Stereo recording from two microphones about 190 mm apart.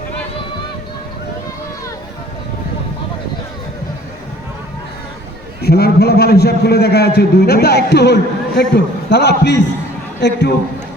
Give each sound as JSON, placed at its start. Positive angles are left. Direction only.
{"t": 5.6, "sound": "a man's voice", "side_deg": 55}